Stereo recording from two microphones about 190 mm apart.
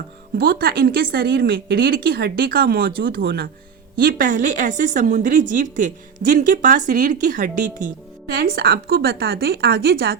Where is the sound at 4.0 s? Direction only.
45° right (ahead or behind).